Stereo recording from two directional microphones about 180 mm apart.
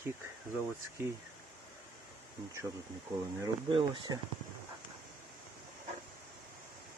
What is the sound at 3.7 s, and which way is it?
Speech, 30° right (ahead or behind).